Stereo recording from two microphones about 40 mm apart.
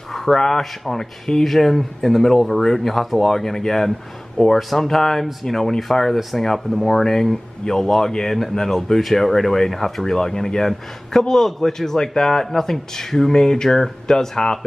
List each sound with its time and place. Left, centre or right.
0.1 s a sound: centre
0.4 s speech: centre
4.6 s speech: centre
4.8 s speech: centre